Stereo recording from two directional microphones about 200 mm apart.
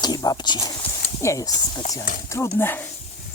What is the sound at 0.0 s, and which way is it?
Speech, 20° left (ahead or behind).